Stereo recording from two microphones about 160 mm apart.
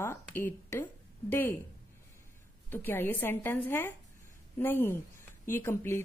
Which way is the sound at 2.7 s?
10° left (ahead or behind).